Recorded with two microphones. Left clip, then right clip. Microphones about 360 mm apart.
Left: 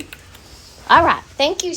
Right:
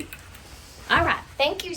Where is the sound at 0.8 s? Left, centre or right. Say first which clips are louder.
Left 9 dB; centre.